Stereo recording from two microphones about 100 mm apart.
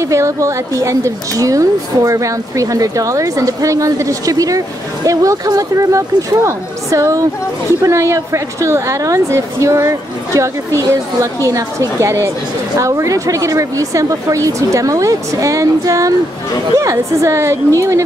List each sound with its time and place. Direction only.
0.1 s a woman's voice: 30° right (ahead or behind)